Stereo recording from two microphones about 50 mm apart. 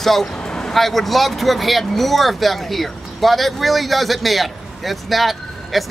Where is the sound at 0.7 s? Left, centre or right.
Centre.